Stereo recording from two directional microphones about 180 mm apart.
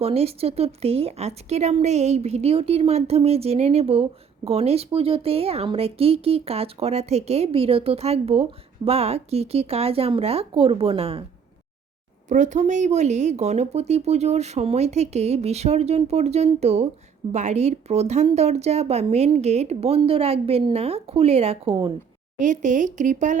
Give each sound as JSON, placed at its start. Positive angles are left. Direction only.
{"t": 0.0, "sound": "speech", "side_deg": -35}
{"t": 12.3, "sound": "speech", "side_deg": -45}
{"t": 22.4, "sound": "speech", "side_deg": -45}